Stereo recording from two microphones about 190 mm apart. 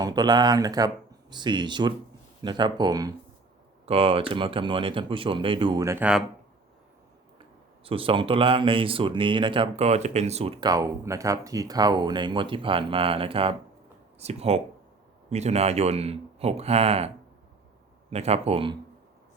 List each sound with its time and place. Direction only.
0.0 s speech: 20° right (ahead or behind)
7.9 s speech: 30° right (ahead or behind)
18.1 s speech: 35° right (ahead or behind)